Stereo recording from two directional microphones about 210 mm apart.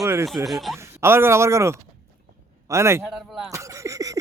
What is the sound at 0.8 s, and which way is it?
Speech, 10° right (ahead or behind).